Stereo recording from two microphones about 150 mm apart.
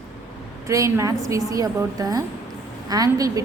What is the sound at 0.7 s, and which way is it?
A woman's voice, 20° right (ahead or behind).